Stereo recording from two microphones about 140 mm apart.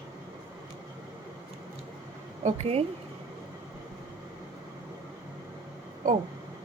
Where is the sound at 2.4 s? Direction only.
45° right (ahead or behind).